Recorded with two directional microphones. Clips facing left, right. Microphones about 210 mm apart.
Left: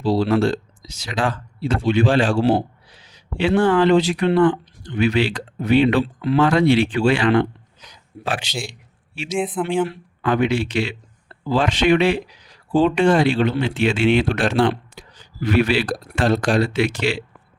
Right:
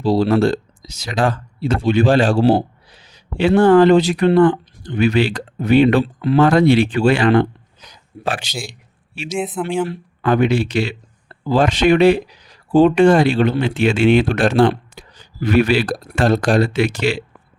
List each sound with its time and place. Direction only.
0.0 s speech: 40° right (ahead or behind)
9.3 s speech: centre (ahead or behind)
9.9 s speech: 40° right (ahead or behind)